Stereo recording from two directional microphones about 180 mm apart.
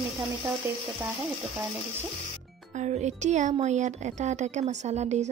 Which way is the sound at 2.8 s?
40° right (ahead or behind).